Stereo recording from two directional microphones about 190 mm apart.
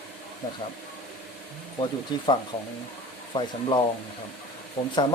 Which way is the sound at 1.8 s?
25° left (ahead or behind).